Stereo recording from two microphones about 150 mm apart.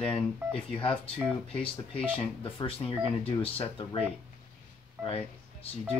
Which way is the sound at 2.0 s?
40° left (ahead or behind).